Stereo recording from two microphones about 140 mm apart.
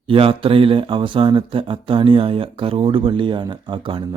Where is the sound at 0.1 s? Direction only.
40° right (ahead or behind).